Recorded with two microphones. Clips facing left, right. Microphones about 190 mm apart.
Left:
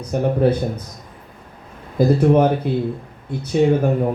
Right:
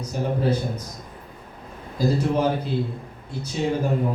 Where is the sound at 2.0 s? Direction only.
60° left (ahead or behind).